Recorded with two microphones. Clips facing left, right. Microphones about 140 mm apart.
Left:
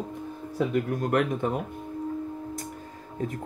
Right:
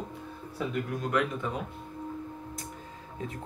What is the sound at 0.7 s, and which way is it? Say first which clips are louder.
Speech: left 3 dB; 50° left (ahead or behind).